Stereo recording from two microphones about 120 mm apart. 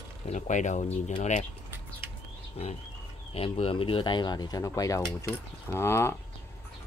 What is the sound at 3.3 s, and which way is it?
Speech, 55° left (ahead or behind).